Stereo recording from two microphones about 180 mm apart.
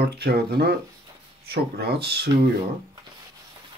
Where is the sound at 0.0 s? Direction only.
60° right (ahead or behind).